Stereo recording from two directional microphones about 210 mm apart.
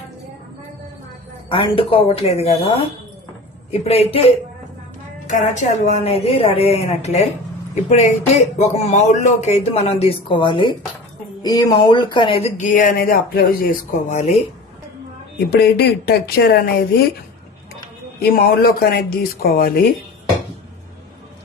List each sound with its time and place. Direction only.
1.5 s a woman's voice: 25° left (ahead or behind)
15.4 s speech: 50° left (ahead or behind)
18.2 s speech: 45° left (ahead or behind)